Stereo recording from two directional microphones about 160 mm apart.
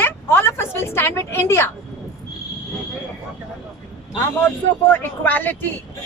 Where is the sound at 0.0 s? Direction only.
15° left (ahead or behind).